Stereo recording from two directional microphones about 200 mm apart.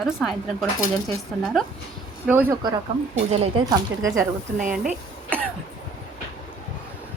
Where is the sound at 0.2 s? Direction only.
Centre (ahead or behind).